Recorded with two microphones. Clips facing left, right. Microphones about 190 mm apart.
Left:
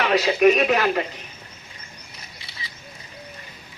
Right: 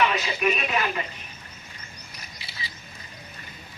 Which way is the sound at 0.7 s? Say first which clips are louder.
Left 7 dB; 70° left (ahead or behind).